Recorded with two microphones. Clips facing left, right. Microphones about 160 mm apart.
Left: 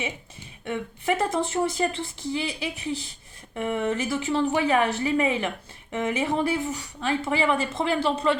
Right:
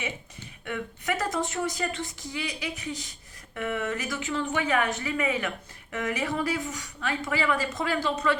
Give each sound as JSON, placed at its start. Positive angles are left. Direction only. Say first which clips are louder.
{"t": 0.6, "sound": "speech", "louder": "left 4 dB", "side_deg": 25}